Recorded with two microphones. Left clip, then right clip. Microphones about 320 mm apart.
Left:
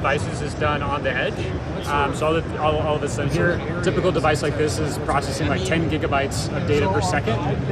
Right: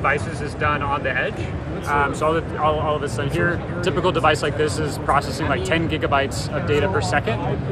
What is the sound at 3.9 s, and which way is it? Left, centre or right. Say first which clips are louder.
A man's voice: right 2 dB; centre.